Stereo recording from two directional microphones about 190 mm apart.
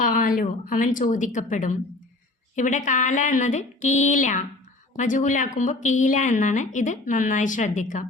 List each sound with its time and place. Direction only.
0.0 s speech: 45° left (ahead or behind)